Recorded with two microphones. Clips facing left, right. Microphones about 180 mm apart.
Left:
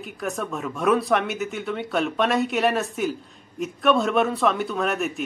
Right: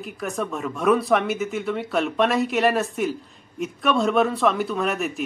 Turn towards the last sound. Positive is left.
turn(degrees=0)  # may be behind; listen again after turning